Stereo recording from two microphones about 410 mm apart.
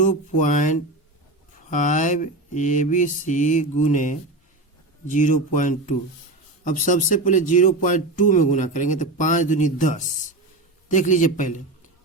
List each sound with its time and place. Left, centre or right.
0.0 s speech: centre